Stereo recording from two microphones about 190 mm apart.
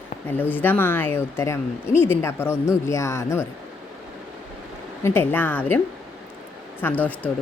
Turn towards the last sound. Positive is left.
turn(degrees=10)  # may be behind; listen again after turning